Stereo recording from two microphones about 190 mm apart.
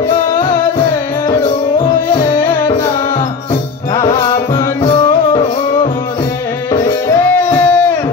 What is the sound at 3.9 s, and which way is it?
Music, 20° left (ahead or behind).